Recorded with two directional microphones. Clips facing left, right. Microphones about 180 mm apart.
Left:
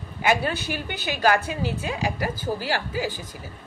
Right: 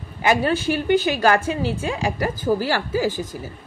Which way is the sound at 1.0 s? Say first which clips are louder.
Right 4 dB; 45° right (ahead or behind).